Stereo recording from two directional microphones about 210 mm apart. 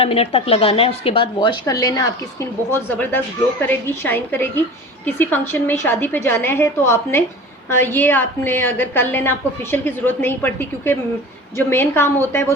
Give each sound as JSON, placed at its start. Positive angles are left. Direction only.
{"t": 0.0, "sound": "a woman's voice", "side_deg": 30}